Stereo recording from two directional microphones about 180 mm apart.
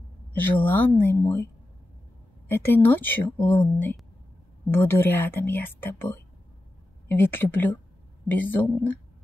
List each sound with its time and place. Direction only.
0.3 s speech: 10° left (ahead or behind)